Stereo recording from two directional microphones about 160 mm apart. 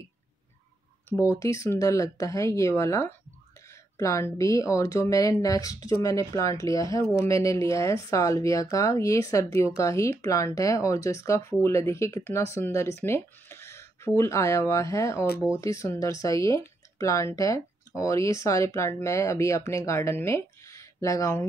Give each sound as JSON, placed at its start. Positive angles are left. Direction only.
{"t": 1.4, "sound": "speech", "side_deg": 20}